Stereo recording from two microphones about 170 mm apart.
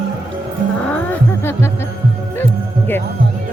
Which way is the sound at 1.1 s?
15° left (ahead or behind).